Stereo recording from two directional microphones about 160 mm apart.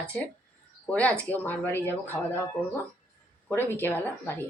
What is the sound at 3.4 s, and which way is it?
Speech, 15° left (ahead or behind).